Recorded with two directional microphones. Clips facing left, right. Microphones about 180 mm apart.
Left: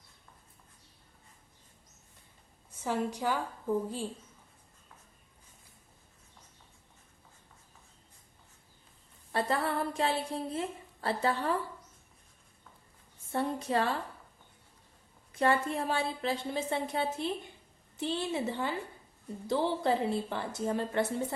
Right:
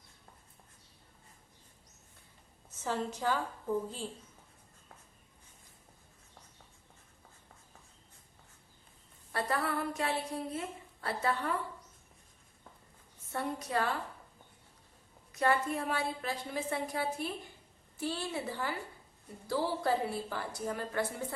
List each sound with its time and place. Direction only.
2.6 s a woman's voice: 10° left (ahead or behind)
9.3 s a woman's voice: 25° left (ahead or behind)
13.3 s a woman's voice: 30° left (ahead or behind)
15.3 s a woman's voice: 30° left (ahead or behind)